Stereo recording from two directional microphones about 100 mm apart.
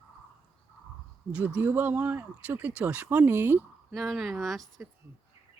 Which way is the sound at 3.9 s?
Centre (ahead or behind).